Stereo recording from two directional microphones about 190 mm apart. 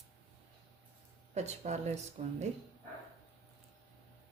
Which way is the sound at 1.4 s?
35° right (ahead or behind).